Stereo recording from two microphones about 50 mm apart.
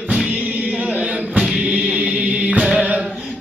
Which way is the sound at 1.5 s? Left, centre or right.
Right.